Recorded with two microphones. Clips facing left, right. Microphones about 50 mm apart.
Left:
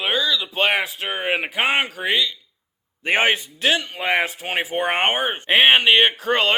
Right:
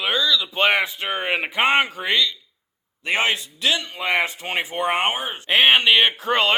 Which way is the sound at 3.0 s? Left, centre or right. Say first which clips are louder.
Left 3 dB; left.